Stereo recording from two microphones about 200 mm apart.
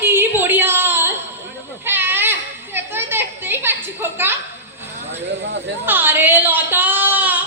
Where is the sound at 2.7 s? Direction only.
10° right (ahead or behind).